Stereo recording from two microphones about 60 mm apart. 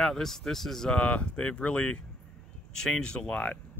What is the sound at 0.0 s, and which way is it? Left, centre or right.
Speech, centre.